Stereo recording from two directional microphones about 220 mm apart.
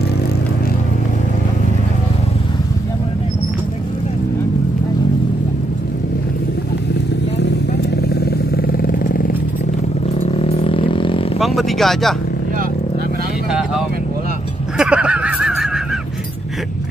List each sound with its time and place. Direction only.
7.3 s vehicle: 50° left (ahead or behind)
10.3 s a sound: 25° left (ahead or behind)
11.3 s vehicle: centre (ahead or behind)
14.8 s honk: 5° right (ahead or behind)